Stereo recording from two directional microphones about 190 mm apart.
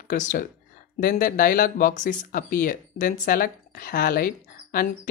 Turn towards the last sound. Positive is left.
turn(degrees=50)  # may be behind; listen again after turning